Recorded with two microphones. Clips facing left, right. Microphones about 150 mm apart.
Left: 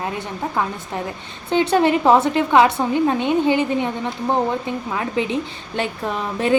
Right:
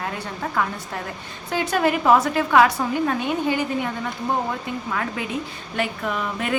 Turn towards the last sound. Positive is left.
turn(degrees=30)  # may be behind; listen again after turning